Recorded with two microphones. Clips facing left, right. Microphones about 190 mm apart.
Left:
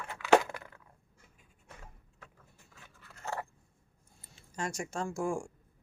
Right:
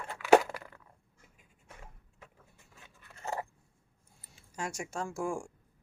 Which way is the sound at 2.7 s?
20° right (ahead or behind).